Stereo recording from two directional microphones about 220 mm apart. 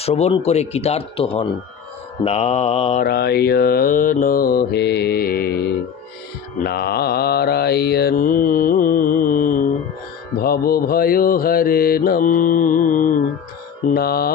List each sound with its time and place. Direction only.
0.0 s speech: 25° left (ahead or behind)
3.0 s mantra: 45° left (ahead or behind)